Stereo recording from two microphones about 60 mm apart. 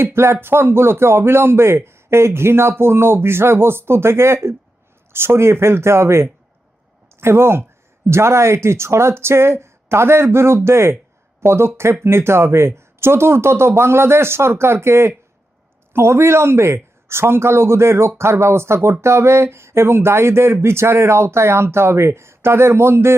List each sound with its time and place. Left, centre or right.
0.0 s speech: right